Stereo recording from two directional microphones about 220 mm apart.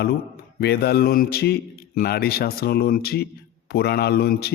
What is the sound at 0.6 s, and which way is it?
A man's voice, 45° left (ahead or behind).